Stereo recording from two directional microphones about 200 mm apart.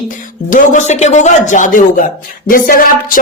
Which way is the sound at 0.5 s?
40° left (ahead or behind).